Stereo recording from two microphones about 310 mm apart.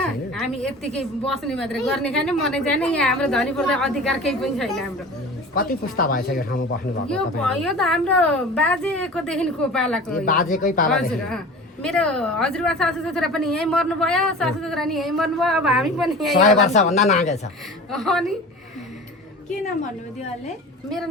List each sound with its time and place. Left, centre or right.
0.0 s a woman's voice: centre
5.5 s speech: left
7.1 s a woman's voice: centre
10.5 s speech: left
10.9 s a woman's voice: centre
16.6 s speech: left
17.9 s a woman's voice: centre